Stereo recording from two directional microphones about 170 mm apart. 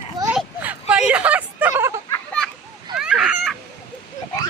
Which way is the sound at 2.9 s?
5° right (ahead or behind).